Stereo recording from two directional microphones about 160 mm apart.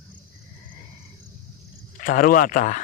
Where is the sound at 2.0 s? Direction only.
65° left (ahead or behind).